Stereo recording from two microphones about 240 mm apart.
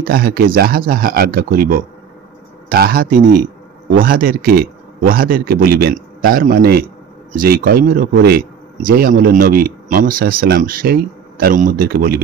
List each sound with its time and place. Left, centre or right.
0.0 s speech: right